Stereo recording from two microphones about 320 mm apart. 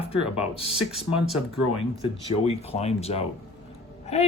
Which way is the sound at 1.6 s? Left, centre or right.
Centre.